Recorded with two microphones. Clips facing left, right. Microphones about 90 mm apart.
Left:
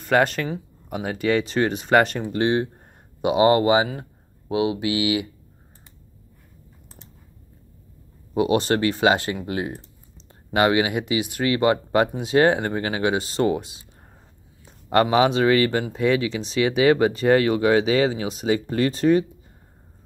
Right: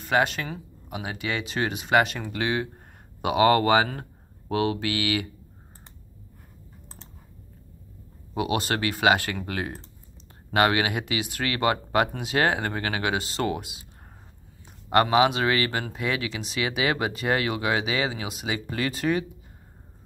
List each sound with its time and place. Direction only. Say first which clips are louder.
0.0 s speech: left 4 dB; 45° left (ahead or behind)
2.2 s speech: left 6 dB; 30° left (ahead or behind)
8.4 s speech: left 6 dB; 30° left (ahead or behind)
14.9 s speech: left 2 dB; 25° right (ahead or behind)
15.1 s speech: left 4 dB; 30° left (ahead or behind)